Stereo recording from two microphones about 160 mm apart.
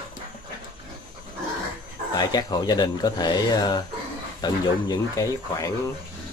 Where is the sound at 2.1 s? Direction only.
25° left (ahead or behind).